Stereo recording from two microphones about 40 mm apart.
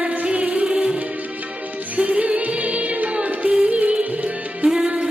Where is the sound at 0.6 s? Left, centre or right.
Right.